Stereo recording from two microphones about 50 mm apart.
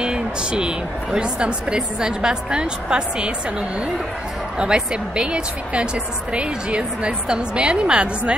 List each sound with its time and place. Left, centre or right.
0.0 s a woman's voice: centre
4.6 s a woman's voice: centre